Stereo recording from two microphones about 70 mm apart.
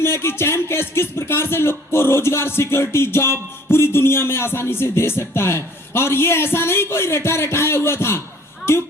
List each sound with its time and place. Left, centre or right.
0.0 s music: left